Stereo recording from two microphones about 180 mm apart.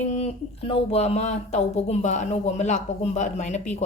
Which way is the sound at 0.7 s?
35° left (ahead or behind).